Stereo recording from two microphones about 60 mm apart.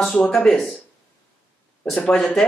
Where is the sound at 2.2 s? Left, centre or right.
Centre.